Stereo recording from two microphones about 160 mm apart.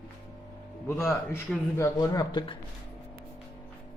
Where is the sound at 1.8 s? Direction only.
25° left (ahead or behind).